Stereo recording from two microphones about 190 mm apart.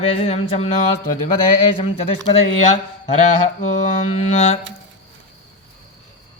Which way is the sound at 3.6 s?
40° left (ahead or behind).